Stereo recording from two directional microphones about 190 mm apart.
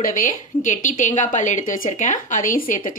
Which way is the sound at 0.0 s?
45° left (ahead or behind).